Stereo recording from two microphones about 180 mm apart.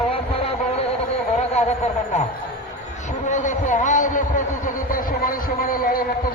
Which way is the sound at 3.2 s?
45° left (ahead or behind).